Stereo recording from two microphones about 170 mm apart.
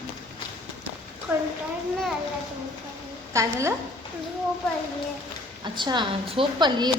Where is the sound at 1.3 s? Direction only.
10° right (ahead or behind).